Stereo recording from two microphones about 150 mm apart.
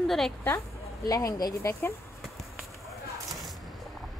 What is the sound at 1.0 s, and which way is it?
Speech, 25° left (ahead or behind).